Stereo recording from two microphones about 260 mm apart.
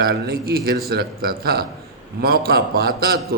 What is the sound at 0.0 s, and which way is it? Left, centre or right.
A man's voice, right.